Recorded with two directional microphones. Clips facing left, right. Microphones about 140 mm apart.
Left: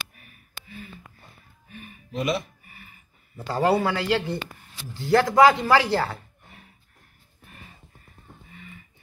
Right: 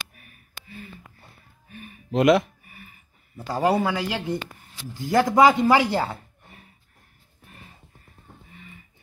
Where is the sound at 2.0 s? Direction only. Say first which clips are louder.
Right 9 dB; 90° right.